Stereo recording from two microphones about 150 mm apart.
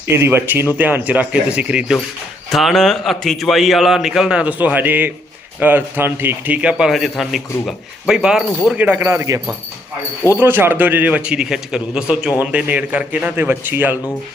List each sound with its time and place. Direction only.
0.1 s a man's voice: 15° right (ahead or behind)